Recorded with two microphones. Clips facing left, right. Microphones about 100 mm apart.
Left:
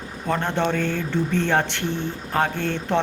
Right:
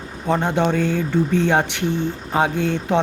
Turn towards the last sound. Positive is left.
turn(degrees=-15)  # may be behind; listen again after turning